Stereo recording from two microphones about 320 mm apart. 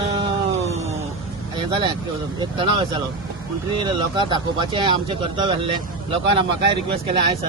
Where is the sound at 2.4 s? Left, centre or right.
Centre.